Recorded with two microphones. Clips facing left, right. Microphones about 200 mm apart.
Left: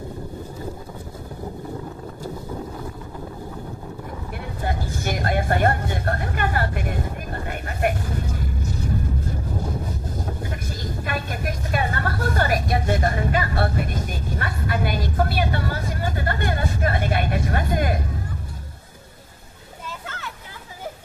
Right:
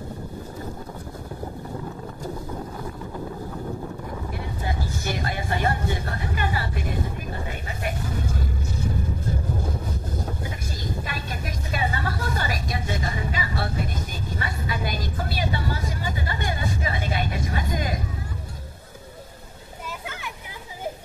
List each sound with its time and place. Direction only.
4.6 s speech: 60° left (ahead or behind)
7.4 s a sound: 60° left (ahead or behind)
11.1 s vehicle: 55° left (ahead or behind)